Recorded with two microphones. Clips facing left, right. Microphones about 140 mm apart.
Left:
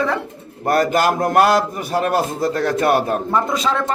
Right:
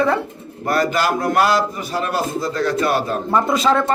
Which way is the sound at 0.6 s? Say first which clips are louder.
Left 2 dB; 50° left (ahead or behind).